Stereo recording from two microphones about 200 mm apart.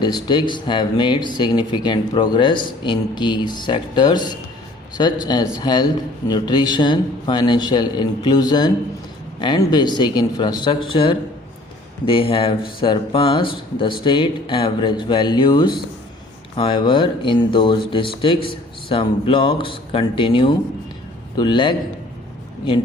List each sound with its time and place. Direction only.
0.0 s speech: 20° left (ahead or behind)